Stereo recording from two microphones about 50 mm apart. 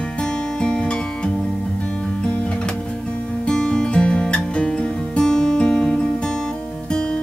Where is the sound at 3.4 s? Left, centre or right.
Centre.